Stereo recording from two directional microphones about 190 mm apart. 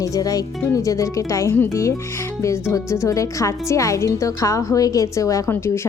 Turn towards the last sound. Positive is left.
turn(degrees=15)  # may be behind; listen again after turning